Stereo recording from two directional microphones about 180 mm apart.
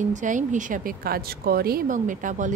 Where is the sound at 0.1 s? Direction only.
45° right (ahead or behind).